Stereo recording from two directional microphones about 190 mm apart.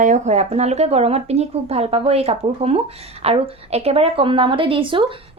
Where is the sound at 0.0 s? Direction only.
40° right (ahead or behind).